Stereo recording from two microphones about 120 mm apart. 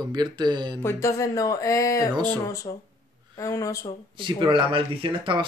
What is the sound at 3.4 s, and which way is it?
Speech, 30° left (ahead or behind).